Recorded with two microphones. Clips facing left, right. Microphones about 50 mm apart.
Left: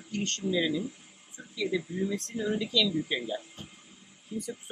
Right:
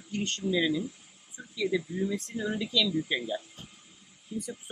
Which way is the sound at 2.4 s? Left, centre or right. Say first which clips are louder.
Left 2 dB; centre.